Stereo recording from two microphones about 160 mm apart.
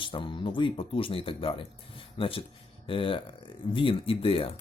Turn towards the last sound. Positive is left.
turn(degrees=35)  # may be behind; listen again after turning